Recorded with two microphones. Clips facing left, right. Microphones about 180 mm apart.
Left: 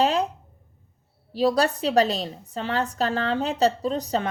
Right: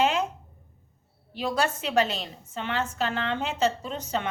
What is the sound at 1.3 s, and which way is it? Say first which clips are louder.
A woman's voice: left 6 dB; 35° left (ahead or behind).